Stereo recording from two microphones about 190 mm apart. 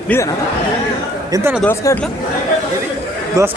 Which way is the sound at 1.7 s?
10° left (ahead or behind).